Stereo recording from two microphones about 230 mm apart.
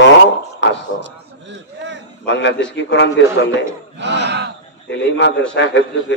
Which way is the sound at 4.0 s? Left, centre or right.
Right.